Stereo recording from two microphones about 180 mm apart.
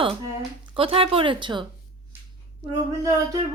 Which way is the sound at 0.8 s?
30° right (ahead or behind).